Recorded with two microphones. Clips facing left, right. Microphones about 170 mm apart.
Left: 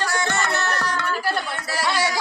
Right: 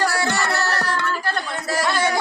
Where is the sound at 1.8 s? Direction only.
5° left (ahead or behind).